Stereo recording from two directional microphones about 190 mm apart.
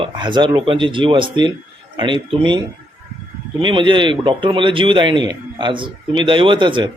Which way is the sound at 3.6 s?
25° right (ahead or behind).